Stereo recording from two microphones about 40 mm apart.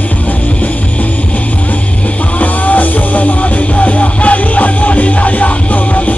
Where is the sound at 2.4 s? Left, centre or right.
Left.